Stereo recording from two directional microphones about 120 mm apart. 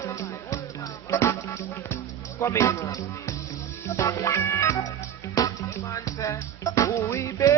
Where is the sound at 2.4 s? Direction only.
25° left (ahead or behind).